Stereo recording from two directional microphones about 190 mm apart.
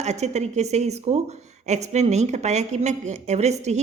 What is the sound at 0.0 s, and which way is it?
A woman's voice, 35° right (ahead or behind).